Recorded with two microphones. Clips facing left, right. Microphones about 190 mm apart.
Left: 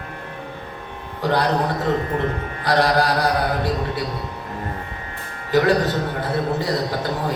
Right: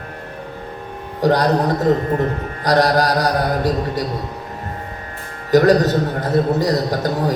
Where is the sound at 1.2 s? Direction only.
40° right (ahead or behind).